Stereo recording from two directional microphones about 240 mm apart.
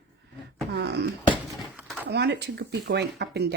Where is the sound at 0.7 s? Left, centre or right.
Right.